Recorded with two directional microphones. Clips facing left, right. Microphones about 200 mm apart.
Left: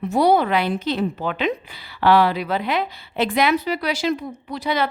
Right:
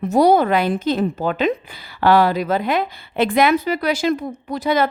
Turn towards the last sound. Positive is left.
turn(degrees=-45)  # may be behind; listen again after turning